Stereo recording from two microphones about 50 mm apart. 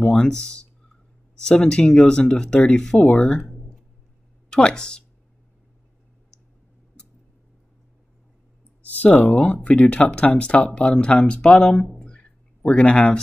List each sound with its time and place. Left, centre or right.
0.0 s speech: centre
8.9 s speech: left
11.4 s a sound: centre
12.7 s speech: left